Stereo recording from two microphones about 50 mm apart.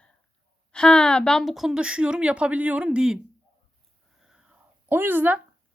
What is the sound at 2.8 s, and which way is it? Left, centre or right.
Speech, centre.